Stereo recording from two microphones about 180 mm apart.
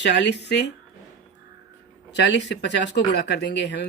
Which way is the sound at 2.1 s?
75° left (ahead or behind).